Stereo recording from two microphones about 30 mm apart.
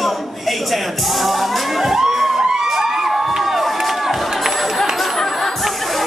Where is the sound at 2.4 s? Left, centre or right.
Centre.